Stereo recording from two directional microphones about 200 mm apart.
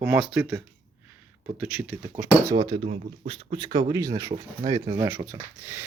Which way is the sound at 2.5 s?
25° right (ahead or behind).